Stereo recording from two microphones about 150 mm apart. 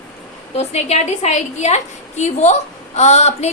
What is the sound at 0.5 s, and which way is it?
A woman's voice, 45° left (ahead or behind).